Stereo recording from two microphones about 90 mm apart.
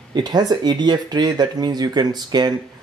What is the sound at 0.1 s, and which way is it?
Speech, 50° right (ahead or behind).